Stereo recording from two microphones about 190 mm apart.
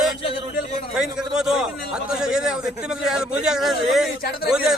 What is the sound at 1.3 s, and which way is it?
A man's voice, 5° right (ahead or behind).